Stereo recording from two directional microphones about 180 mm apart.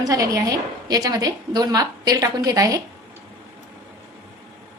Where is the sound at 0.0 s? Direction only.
20° right (ahead or behind).